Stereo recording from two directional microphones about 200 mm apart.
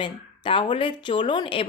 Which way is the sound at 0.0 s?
25° left (ahead or behind).